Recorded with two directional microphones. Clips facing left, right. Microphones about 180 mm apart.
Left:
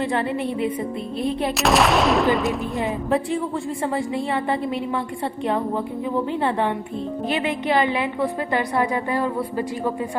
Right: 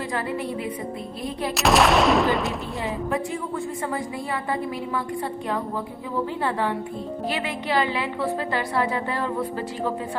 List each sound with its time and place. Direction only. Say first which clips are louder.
0.0 s a woman's voice: left 5 dB; 25° left (ahead or behind)
1.5 s gunshot: right 1 dB; centre (ahead or behind)
3.8 s a woman's voice: left 5 dB; 25° left (ahead or behind)
6.4 s a woman's voice: left 3 dB; 25° left (ahead or behind)